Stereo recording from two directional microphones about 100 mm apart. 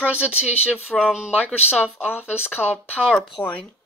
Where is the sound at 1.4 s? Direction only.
15° left (ahead or behind).